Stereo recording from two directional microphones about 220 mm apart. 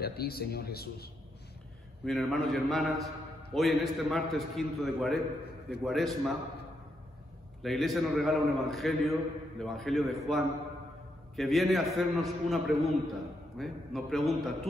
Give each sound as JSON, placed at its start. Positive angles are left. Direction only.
{"t": 0.0, "sound": "speech", "side_deg": 45}
{"t": 2.0, "sound": "a man's voice", "side_deg": 0}
{"t": 7.6, "sound": "a man's voice", "side_deg": 0}
{"t": 11.3, "sound": "a man's voice", "side_deg": 0}